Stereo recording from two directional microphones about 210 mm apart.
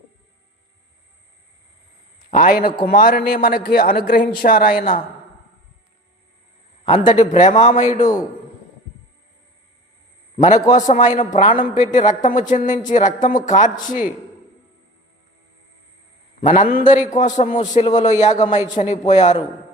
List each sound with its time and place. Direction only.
2.3 s a man's voice: 40° left (ahead or behind)
6.8 s a man's voice: 35° left (ahead or behind)
10.3 s a man's voice: 35° left (ahead or behind)
16.5 s a man's voice: 40° left (ahead or behind)